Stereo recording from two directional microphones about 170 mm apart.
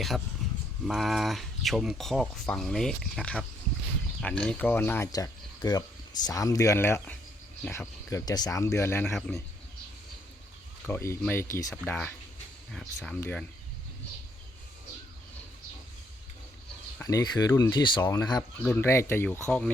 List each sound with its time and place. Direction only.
0.4 s a sound: centre (ahead or behind)
0.9 s speech: centre (ahead or behind)
10.8 s speech: 15° left (ahead or behind)
17.0 s speech: 20° left (ahead or behind)
18.5 s speech: 10° left (ahead or behind)